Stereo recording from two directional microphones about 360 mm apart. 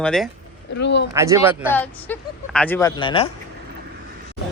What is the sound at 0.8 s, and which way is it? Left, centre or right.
Speech, left.